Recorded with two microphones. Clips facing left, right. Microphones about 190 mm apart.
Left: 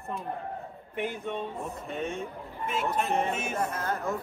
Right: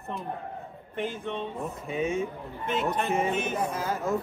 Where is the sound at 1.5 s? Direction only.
Centre (ahead or behind).